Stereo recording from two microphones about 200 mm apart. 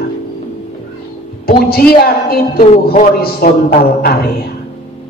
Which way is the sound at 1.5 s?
50° left (ahead or behind).